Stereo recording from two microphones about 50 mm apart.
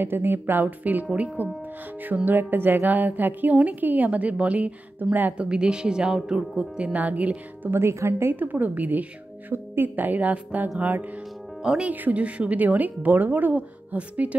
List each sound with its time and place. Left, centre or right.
0.0 s speech: right
2.2 s a woman's voice: right
5.5 s speech: centre
6.8 s speech: right
7.7 s a woman's voice: right
8.3 s a woman's voice: right
11.6 s speech: centre
11.9 s a woman's voice: right